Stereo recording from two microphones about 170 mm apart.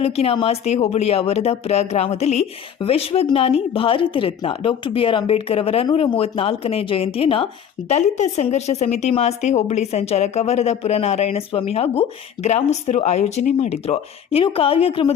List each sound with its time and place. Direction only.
0.0 s speech: 35° left (ahead or behind)